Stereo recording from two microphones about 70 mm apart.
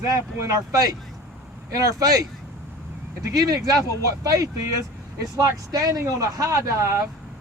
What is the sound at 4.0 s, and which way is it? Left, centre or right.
Speech, right.